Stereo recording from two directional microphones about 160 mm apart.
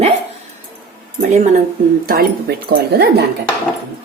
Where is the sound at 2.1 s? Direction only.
75° right (ahead or behind); by 3.3 s 90° right.